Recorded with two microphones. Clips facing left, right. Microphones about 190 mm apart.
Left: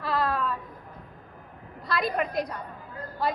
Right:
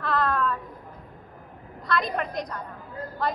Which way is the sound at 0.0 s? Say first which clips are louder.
Right 2 dB; 5° left (ahead or behind).